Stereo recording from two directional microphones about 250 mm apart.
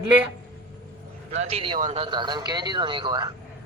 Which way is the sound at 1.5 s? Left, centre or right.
Centre.